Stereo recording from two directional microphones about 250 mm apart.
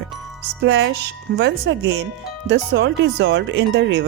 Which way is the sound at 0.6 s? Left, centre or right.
Right.